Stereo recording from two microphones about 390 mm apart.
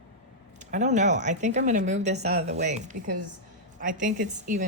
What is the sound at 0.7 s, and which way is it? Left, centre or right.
A woman's voice, centre.